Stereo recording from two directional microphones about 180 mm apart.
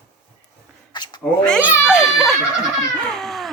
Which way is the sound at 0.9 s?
25° left (ahead or behind).